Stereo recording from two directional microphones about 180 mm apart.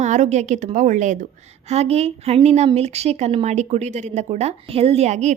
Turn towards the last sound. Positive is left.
turn(degrees=-40)  # may be behind; listen again after turning